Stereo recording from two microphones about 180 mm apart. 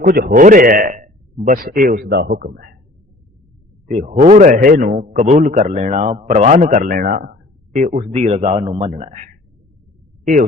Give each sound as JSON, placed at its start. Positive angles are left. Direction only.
{"t": 0.0, "sound": "a man's voice", "side_deg": -55}
{"t": 3.9, "sound": "a man's voice", "side_deg": -40}